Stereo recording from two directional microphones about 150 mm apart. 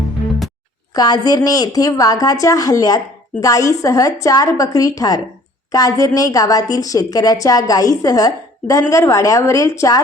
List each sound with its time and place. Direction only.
0.9 s a woman's voice: 25° left (ahead or behind)